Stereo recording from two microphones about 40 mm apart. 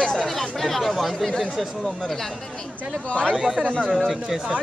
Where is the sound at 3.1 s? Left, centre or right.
Left.